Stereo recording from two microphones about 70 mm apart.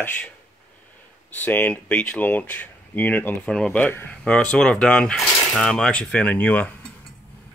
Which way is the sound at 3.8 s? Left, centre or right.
Left.